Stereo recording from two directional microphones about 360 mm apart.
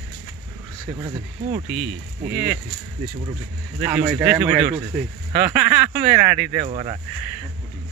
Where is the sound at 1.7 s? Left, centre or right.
Right.